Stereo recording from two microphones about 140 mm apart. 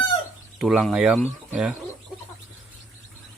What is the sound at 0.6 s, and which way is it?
Speech, 5° right (ahead or behind).